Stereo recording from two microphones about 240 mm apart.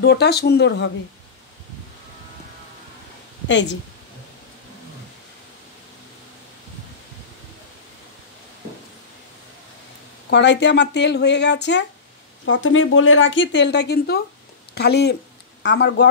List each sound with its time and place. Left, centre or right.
0.0 s speech: left
3.4 s speech: left
10.3 s a woman's voice: left